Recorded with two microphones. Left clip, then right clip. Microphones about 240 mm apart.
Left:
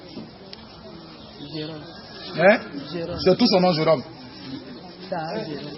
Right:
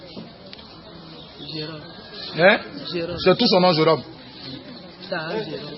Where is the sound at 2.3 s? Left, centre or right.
Right.